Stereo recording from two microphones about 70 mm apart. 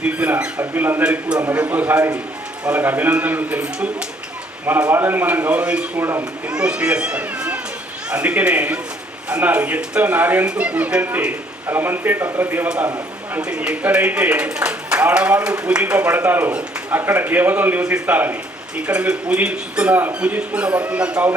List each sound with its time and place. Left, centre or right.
0.0 s a man's voice: right
0.6 s a man's voice: right
4.9 s a man's voice: right
6.0 s speech: right
6.5 s a man's voice: centre; by 12.6 s right
13.4 s a man's voice: centre
18.8 s a man's voice: centre